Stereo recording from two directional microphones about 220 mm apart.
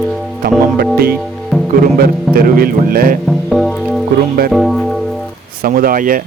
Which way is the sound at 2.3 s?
40° right (ahead or behind).